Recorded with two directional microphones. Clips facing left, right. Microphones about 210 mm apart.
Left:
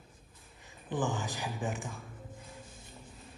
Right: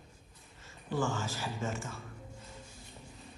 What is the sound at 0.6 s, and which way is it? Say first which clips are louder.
Speech: even; 15° left (ahead or behind).